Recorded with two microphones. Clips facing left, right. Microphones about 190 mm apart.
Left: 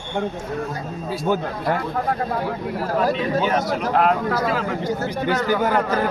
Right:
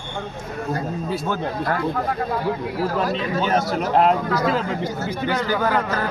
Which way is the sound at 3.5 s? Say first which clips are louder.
Right 1 dB; 30° right (ahead or behind).